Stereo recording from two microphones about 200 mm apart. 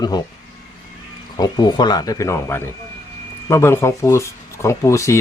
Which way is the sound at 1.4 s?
20° left (ahead or behind).